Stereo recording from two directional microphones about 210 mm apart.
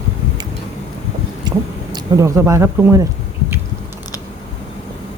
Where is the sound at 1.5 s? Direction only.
15° right (ahead or behind).